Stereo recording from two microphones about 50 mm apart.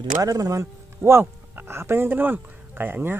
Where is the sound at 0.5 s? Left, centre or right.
Right.